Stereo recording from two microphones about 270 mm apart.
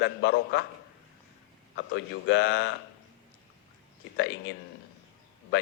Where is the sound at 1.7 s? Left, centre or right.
Left.